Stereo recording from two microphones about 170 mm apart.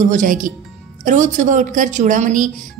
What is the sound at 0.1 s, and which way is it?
Speech, 50° right (ahead or behind).